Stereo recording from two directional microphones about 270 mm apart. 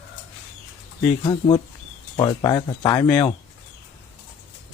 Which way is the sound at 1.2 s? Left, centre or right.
Centre.